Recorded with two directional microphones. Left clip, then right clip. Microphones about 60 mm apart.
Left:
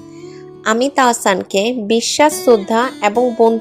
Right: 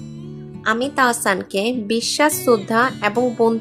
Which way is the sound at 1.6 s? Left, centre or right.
Left.